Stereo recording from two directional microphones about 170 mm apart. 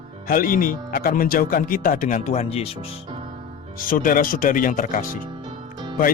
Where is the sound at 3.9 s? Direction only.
55° left (ahead or behind).